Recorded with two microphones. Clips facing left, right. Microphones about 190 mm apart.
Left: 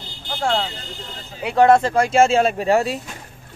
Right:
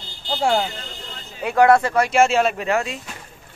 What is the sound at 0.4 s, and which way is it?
Speech, 10° right (ahead or behind).